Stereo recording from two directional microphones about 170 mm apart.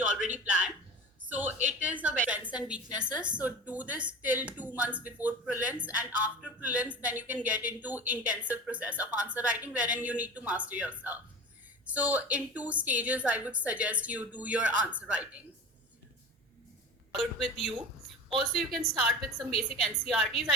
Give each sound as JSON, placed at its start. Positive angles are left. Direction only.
{"t": 0.3, "sound": "speech", "side_deg": -10}
{"t": 17.2, "sound": "a woman's voice", "side_deg": 0}